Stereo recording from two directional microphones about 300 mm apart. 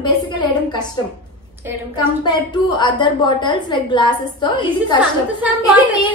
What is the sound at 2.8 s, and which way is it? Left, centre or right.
A woman's voice, centre.